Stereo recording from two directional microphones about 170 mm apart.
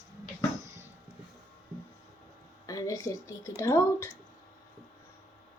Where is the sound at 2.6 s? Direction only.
20° left (ahead or behind).